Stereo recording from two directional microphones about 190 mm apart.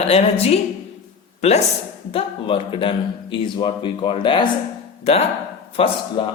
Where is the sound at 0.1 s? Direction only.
30° left (ahead or behind).